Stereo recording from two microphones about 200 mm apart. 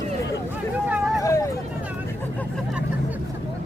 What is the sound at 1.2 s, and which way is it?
Hubbub, 15° left (ahead or behind).